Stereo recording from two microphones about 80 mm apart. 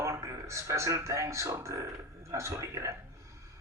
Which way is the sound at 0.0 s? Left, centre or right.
Right.